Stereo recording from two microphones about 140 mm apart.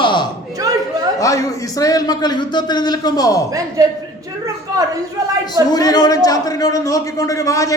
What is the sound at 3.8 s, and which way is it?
Speech, 25° right (ahead or behind).